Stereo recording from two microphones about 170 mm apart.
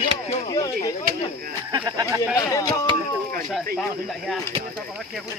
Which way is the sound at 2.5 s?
20° left (ahead or behind).